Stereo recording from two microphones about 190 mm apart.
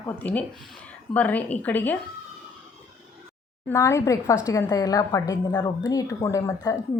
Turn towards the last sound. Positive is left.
turn(degrees=20)  # may be behind; listen again after turning